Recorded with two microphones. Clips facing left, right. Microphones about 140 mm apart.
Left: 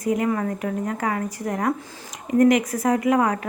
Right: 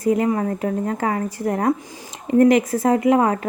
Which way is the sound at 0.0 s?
30° right (ahead or behind).